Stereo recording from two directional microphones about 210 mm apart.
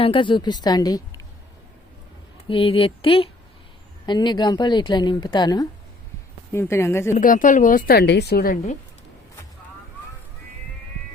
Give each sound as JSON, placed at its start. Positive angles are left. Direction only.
{"t": 0.0, "sound": "a woman's voice", "side_deg": 25}
{"t": 2.5, "sound": "a woman's voice", "side_deg": 25}
{"t": 7.1, "sound": "a woman's voice", "side_deg": 40}